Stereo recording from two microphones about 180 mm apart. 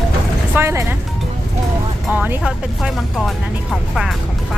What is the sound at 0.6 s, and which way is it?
Speech, 15° right (ahead or behind).